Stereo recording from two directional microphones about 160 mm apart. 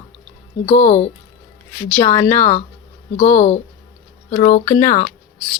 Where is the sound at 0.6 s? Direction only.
40° left (ahead or behind).